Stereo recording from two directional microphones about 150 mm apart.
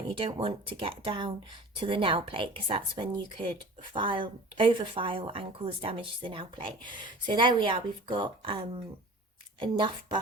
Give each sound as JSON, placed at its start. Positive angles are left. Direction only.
{"t": 0.1, "sound": "speech", "side_deg": -40}